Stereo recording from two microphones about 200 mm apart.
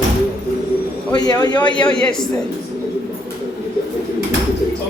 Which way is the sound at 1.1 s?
20° left (ahead or behind).